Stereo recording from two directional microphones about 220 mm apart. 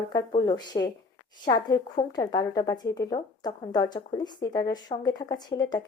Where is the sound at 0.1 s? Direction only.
20° left (ahead or behind).